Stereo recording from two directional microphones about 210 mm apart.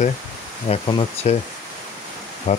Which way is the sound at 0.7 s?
25° left (ahead or behind).